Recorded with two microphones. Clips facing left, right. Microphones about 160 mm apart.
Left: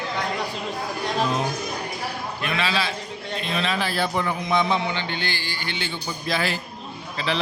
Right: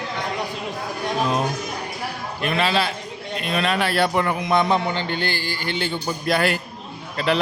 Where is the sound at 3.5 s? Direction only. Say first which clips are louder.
Right 5 dB; 65° right (ahead or behind); by 6.0 s 45° right (ahead or behind).